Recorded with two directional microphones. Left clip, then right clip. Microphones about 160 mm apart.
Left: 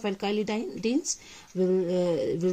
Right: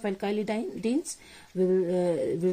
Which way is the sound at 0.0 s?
30° left (ahead or behind).